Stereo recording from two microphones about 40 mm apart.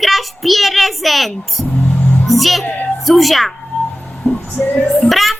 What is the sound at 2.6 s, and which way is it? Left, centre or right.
Speech, left.